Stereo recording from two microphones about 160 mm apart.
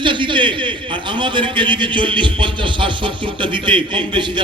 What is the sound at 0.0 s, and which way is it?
A man's voice, 30° right (ahead or behind).